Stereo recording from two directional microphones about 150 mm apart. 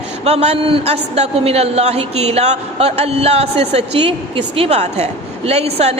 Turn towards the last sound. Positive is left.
turn(degrees=-45)  # may be behind; listen again after turning